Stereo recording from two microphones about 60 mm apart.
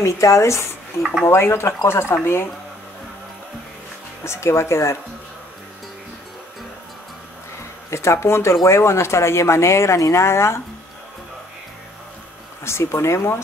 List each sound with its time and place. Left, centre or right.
0.0 s speech: left
1.2 s speech: left
4.2 s speech: left
7.9 s speech: left
12.6 s speech: left